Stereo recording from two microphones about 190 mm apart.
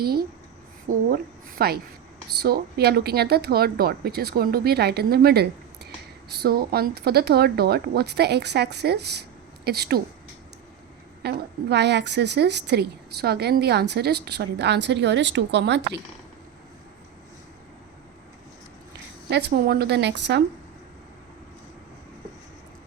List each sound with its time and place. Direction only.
0.0 s a woman's voice: 55° right (ahead or behind)
11.2 s a woman's voice: 60° right (ahead or behind)
19.3 s a woman's voice: 60° right (ahead or behind)